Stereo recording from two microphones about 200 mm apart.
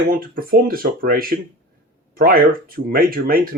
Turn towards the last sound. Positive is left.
turn(degrees=-45)  # may be behind; listen again after turning